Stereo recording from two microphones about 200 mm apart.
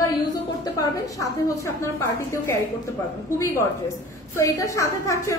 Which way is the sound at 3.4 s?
10° left (ahead or behind).